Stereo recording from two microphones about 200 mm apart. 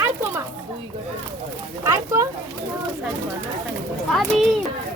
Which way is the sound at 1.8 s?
15° right (ahead or behind).